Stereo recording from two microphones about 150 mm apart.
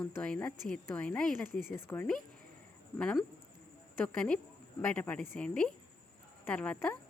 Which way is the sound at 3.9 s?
10° left (ahead or behind).